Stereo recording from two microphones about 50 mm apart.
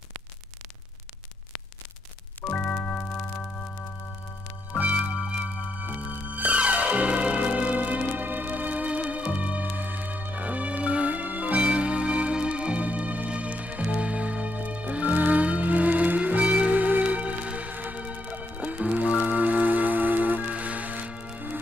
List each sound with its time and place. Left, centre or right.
2.5 s music: left
4.9 s music: right
5.8 s music: right